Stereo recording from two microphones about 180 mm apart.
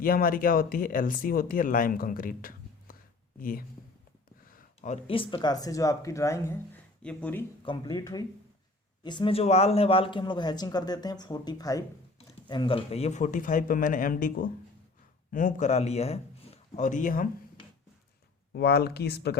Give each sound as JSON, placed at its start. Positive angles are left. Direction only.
{"t": 0.0, "sound": "speech", "side_deg": 55}
{"t": 7.6, "sound": "a man's voice", "side_deg": 25}
{"t": 18.5, "sound": "speech", "side_deg": 60}